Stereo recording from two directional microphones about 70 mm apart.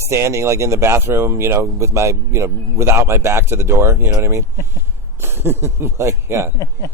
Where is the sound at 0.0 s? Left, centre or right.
Right.